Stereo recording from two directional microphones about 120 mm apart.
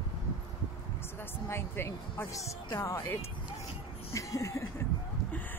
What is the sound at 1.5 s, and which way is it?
Speech, 20° left (ahead or behind).